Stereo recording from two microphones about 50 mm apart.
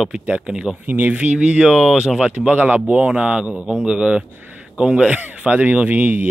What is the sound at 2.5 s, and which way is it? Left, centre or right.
Speech, right.